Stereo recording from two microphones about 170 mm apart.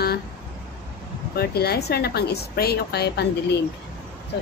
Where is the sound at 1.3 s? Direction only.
70° left (ahead or behind).